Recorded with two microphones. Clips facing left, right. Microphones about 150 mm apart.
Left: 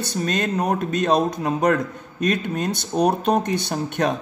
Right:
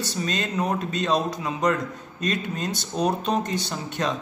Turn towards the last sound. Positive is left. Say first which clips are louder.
# left 5 dB
turn(degrees=55)  # may be behind; listen again after turning